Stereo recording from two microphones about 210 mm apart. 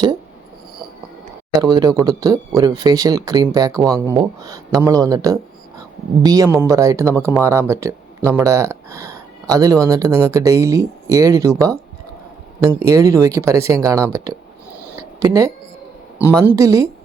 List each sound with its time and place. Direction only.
1.6 s speech: 20° right (ahead or behind)
12.8 s speech: 15° right (ahead or behind)
14.9 s a sound: 15° right (ahead or behind)
16.4 s speech: 15° right (ahead or behind)